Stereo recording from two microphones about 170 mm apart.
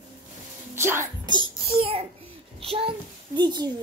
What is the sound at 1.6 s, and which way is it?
A child's voice, 35° right (ahead or behind).